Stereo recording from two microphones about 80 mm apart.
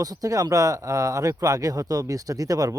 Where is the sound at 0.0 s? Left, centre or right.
Right.